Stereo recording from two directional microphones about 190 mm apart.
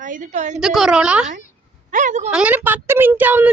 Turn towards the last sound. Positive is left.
turn(degrees=-10)  # may be behind; listen again after turning